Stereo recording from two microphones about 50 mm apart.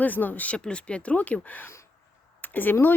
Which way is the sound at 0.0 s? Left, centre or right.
Left.